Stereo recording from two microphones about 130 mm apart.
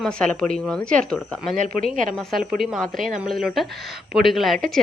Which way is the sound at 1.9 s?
80° right.